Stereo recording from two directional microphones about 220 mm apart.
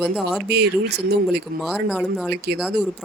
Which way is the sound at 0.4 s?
50° right (ahead or behind).